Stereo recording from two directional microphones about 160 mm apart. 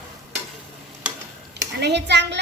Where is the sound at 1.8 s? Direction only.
90° right.